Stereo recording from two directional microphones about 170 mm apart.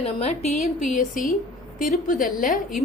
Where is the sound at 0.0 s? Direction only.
40° left (ahead or behind).